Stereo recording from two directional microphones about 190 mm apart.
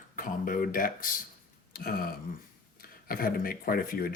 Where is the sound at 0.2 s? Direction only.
45° left (ahead or behind).